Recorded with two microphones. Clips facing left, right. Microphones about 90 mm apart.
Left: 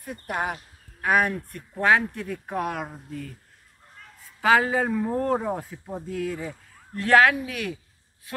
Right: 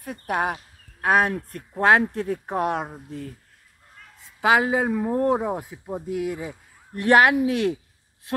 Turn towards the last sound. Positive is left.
turn(degrees=-25)  # may be behind; listen again after turning